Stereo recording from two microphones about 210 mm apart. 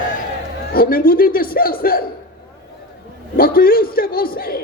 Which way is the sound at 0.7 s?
45° left (ahead or behind).